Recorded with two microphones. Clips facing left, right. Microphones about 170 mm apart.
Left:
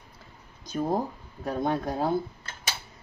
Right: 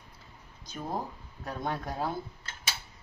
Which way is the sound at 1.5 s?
25° left (ahead or behind).